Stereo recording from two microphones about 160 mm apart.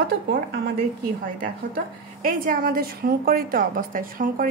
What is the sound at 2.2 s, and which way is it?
A woman's voice, 60° right (ahead or behind).